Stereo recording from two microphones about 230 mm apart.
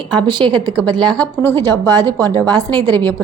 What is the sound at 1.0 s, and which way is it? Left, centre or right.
Speech, centre.